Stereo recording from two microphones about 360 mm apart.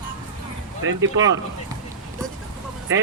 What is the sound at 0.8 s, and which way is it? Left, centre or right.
Speech, right.